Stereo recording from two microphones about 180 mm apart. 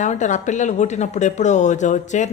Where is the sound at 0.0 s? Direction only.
45° left (ahead or behind).